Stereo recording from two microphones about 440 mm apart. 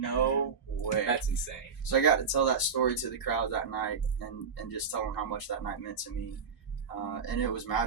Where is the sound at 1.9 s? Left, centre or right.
Left.